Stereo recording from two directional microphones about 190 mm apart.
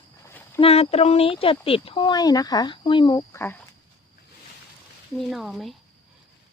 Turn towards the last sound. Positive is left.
turn(degrees=0)  # may be behind; listen again after turning